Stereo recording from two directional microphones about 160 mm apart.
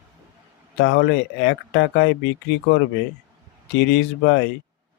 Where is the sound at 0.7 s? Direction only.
90° left.